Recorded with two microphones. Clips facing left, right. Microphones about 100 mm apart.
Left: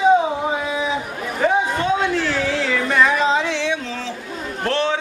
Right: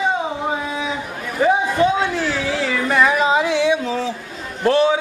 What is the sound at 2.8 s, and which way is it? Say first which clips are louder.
Music: right 1 dB; 5° right (ahead or behind).